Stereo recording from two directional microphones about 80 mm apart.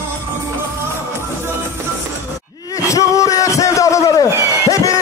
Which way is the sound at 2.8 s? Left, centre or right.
Left.